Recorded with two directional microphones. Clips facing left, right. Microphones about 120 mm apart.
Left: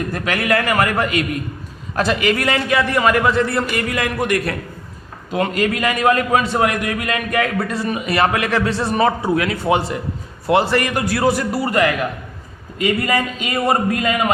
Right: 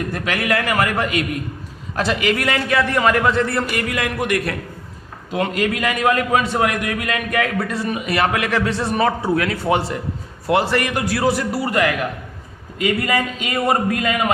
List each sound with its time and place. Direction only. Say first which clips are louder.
0.1 s a man's voice: left 3 dB; 40° left (ahead or behind)
2.6 s a man's voice: even; 15° left (ahead or behind)
3.5 s a man's voice: left 1 dB; 20° left (ahead or behind)
3.8 s a man's voice: left 2 dB; 35° left (ahead or behind)
9.2 s a man's voice: left 1 dB; 15° left (ahead or behind)
10.9 s a man's voice: left 1 dB; 50° left (ahead or behind)
12.8 s a man's voice: left 1 dB; 30° left (ahead or behind)